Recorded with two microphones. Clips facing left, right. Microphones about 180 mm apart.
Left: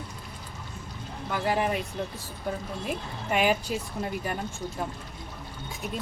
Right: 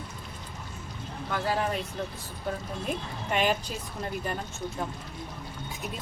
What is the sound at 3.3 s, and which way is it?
Speech, 10° left (ahead or behind).